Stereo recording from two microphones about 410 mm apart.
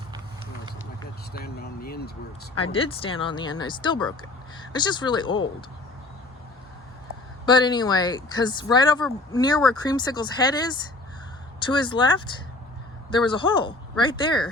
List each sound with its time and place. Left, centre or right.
1.3 s speech: left
7.4 s speech: centre